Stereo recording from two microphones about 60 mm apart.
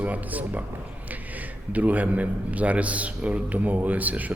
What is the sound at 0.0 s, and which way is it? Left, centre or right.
Speech, right.